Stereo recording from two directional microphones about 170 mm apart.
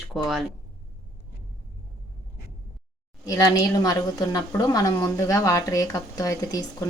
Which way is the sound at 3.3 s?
20° left (ahead or behind).